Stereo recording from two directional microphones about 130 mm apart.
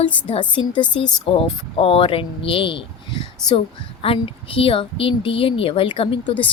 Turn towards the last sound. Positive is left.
turn(degrees=45)  # may be behind; listen again after turning